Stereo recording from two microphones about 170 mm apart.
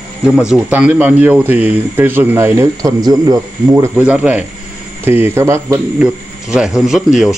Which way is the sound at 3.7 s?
10° right (ahead or behind).